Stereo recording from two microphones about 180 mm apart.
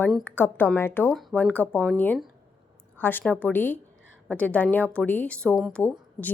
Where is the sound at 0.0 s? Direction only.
10° left (ahead or behind).